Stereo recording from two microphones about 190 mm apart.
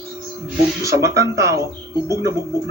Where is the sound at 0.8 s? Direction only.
15° right (ahead or behind).